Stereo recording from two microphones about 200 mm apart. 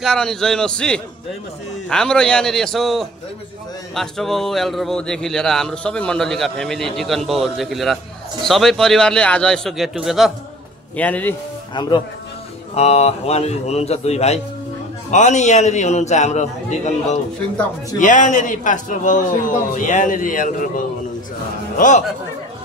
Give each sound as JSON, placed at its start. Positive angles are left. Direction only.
{"t": 0.0, "sound": "speech", "side_deg": 0}
{"t": 11.7, "sound": "speech", "side_deg": 20}
{"t": 12.7, "sound": "a man's voice", "side_deg": 30}